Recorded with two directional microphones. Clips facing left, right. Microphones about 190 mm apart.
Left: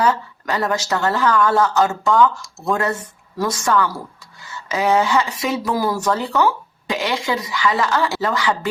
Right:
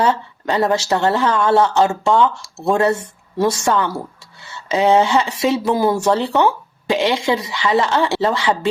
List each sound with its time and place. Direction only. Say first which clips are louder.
0.0 s speech: right 1 dB; 25° right (ahead or behind)